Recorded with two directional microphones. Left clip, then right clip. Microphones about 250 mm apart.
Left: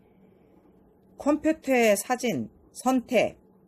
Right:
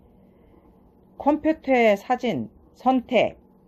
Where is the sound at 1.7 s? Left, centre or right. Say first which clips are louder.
Right 3 dB; centre.